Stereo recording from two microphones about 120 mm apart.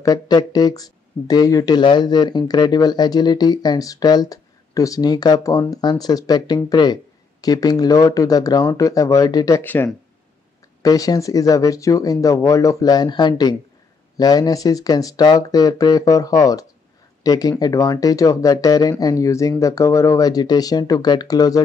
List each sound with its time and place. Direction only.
0.0 s speech: 35° left (ahead or behind)
9.6 s speech: 15° left (ahead or behind)
10.8 s speech: 30° left (ahead or behind)